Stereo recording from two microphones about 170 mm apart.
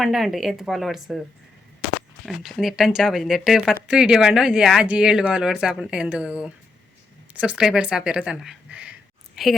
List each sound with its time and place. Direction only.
0.0 s speech: centre (ahead or behind)
2.2 s speech: centre (ahead or behind)
7.3 s a sound: 5° right (ahead or behind)